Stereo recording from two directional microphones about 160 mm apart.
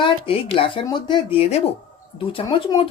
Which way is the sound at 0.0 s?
35° left (ahead or behind).